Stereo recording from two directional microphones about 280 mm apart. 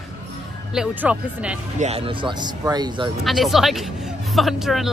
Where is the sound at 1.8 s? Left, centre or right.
Right.